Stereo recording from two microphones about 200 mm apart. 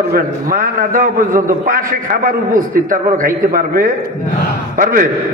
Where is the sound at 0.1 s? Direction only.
45° right (ahead or behind).